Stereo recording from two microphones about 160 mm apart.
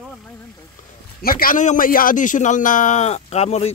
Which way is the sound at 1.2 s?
65° left (ahead or behind).